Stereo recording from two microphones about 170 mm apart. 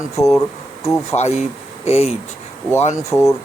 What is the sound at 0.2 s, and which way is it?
Speech, 20° left (ahead or behind).